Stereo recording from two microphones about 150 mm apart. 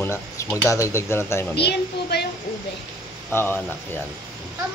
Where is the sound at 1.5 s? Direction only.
90° left.